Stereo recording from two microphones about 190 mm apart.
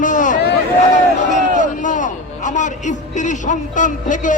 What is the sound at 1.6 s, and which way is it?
A man's voice, 40° left (ahead or behind).